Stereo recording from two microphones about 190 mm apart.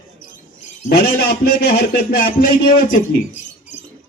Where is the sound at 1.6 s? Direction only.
55° left (ahead or behind).